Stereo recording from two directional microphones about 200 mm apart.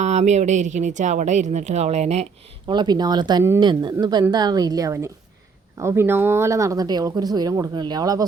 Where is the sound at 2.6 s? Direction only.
20° right (ahead or behind).